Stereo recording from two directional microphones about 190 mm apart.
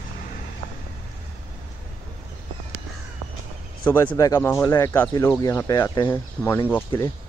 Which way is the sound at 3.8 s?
10° left (ahead or behind).